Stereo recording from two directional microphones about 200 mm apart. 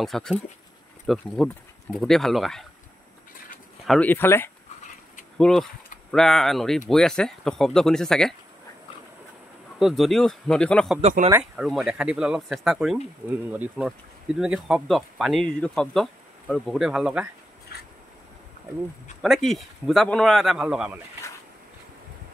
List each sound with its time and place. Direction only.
0.0 s speech: centre (ahead or behind)
3.8 s speech: 5° left (ahead or behind)
9.8 s speech: centre (ahead or behind)
11.0 s speech: 35° right (ahead or behind)
11.5 s speech: centre (ahead or behind)
17.7 s a sound: 50° left (ahead or behind)
19.2 s speech: centre (ahead or behind)